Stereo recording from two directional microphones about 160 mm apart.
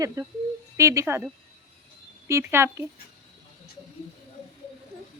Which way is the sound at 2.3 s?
15° right (ahead or behind).